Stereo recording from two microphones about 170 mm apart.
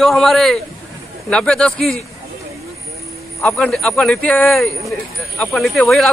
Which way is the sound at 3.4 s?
5° left (ahead or behind).